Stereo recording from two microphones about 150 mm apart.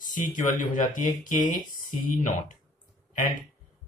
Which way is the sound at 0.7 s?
60° left (ahead or behind).